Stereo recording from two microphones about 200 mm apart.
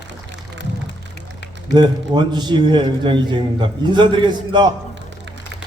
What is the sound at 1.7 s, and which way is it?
A man's voice, 20° right (ahead or behind).